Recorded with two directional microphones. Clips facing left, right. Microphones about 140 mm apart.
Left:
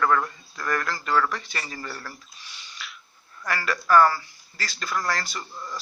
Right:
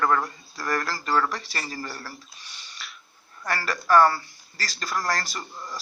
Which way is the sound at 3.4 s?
30° right (ahead or behind).